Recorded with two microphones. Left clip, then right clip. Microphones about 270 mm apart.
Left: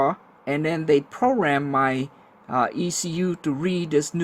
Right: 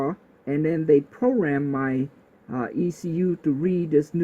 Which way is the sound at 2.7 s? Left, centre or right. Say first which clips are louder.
Even; left.